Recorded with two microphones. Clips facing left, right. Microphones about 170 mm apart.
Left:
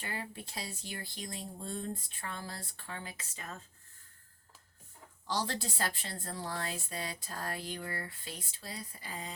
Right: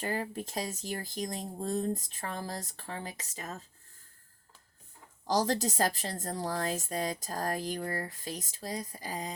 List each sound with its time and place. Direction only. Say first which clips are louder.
0.0 s a woman's voice: right 8 dB; 40° right (ahead or behind)
5.2 s a woman's voice: right 7 dB; 40° right (ahead or behind)